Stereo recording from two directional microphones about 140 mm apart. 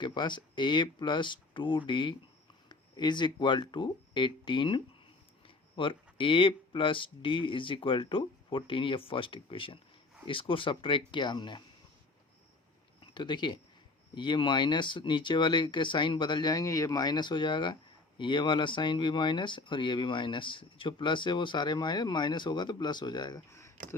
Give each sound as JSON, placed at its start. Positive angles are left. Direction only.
{"t": 0.0, "sound": "speech", "side_deg": 30}
{"t": 13.0, "sound": "speech", "side_deg": 35}
{"t": 23.5, "sound": "a sound", "side_deg": 20}